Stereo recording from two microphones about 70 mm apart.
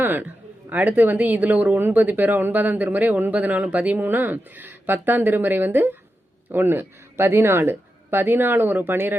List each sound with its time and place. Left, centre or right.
0.0 s a woman's voice: right